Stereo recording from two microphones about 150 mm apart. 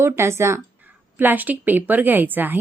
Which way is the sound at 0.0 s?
15° right (ahead or behind).